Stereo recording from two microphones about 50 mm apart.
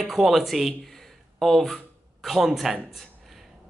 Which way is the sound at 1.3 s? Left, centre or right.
Centre.